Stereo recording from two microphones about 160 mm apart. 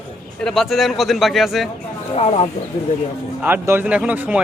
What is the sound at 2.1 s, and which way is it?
Speech, 40° left (ahead or behind).